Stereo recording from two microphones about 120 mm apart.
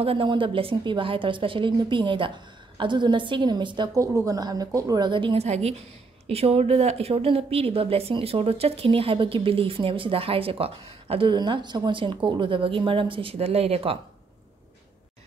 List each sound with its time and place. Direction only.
0.0 s a woman's voice: 50° right (ahead or behind)
4.0 s a woman's voice: 25° right (ahead or behind); by 5.4 s 45° right (ahead or behind)
5.4 s a woman's voice: 60° right (ahead or behind)